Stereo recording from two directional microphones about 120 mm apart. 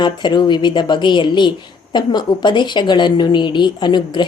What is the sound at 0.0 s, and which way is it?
A woman's voice, 40° left (ahead or behind).